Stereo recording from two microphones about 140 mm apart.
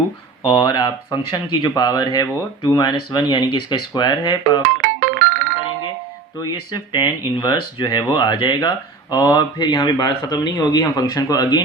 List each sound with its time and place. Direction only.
0.4 s speech: 30° left (ahead or behind)
4.8 s music: 70° right (ahead or behind)
6.4 s speech: 30° left (ahead or behind)